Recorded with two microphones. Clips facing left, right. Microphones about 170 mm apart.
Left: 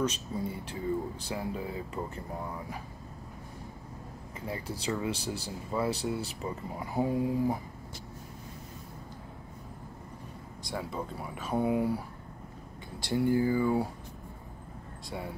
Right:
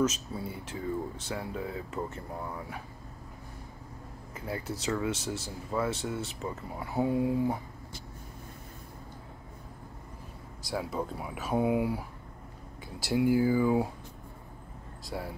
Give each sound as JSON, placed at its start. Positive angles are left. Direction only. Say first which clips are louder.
{"t": 0.1, "sound": "speech", "louder": "left 3 dB", "side_deg": -5}
{"t": 4.6, "sound": "speech", "louder": "right 1 dB", "side_deg": 30}
{"t": 5.4, "sound": "speech", "louder": "left 1 dB", "side_deg": 0}
{"t": 10.6, "sound": "speech", "louder": "right 3 dB", "side_deg": -5}
{"t": 13.0, "sound": "speech", "louder": "right 2 dB", "side_deg": -5}
{"t": 15.0, "sound": "speech", "louder": "right 1 dB", "side_deg": 0}